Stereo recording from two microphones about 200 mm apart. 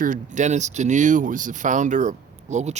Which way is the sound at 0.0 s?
40° right (ahead or behind).